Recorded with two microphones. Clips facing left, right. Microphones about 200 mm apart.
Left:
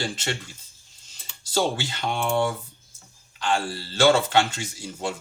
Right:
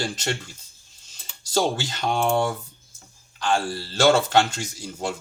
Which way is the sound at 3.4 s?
45° right (ahead or behind).